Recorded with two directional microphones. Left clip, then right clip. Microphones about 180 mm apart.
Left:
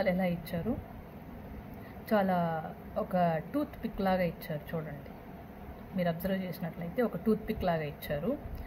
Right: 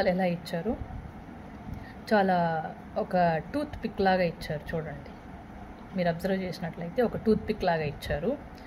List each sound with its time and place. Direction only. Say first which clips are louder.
0.0 s a woman's voice: right 4 dB; 20° right (ahead or behind)
2.0 s speech: right 5 dB; 15° right (ahead or behind)
5.9 s speech: right 5 dB; 15° right (ahead or behind)